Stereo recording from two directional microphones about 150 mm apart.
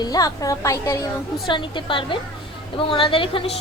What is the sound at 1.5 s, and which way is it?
A woman's voice, 30° left (ahead or behind).